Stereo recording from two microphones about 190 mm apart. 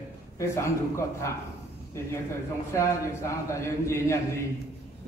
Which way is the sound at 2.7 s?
15° left (ahead or behind).